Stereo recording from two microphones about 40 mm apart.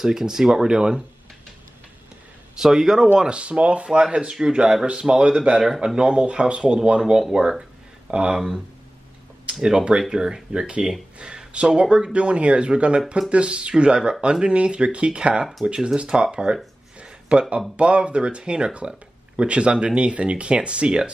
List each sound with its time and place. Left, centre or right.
0.0 s speech: centre
2.5 s speech: centre
3.2 s speech: right
9.5 s speech: right
17.0 s a sound: right
17.7 s speech: right